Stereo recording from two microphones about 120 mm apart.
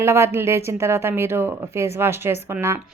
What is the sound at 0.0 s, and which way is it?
A woman's voice, 20° right (ahead or behind).